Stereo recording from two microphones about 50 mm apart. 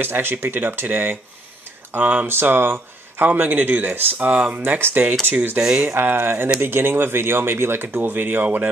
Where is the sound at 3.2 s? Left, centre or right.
Right.